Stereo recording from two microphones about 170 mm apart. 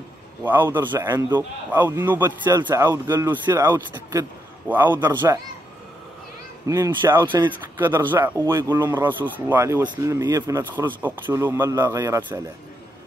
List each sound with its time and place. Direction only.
0.4 s speech: 10° right (ahead or behind)
6.7 s speech: 20° right (ahead or behind)
7.7 s speech: 10° right (ahead or behind)